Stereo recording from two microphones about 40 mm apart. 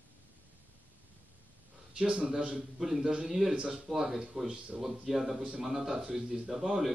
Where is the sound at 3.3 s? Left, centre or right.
Centre.